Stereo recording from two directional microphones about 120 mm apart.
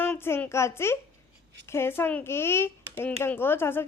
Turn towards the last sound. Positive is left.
turn(degrees=20)  # may be behind; listen again after turning